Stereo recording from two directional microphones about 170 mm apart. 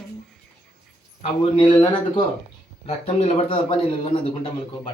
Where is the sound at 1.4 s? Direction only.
25° left (ahead or behind).